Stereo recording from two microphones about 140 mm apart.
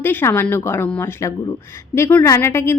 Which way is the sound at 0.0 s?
15° left (ahead or behind).